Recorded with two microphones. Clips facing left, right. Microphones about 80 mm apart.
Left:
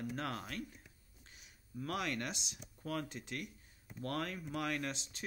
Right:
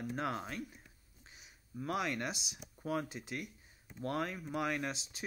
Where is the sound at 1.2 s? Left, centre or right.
Centre.